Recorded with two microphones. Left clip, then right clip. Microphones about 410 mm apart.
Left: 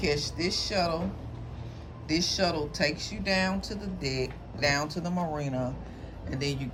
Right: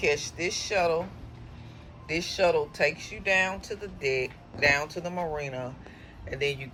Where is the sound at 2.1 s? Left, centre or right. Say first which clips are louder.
Right 3 dB; centre.